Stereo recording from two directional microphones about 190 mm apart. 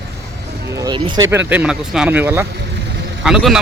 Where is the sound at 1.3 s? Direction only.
10° right (ahead or behind).